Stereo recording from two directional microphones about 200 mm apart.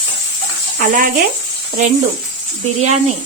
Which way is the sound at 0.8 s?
45° right (ahead or behind).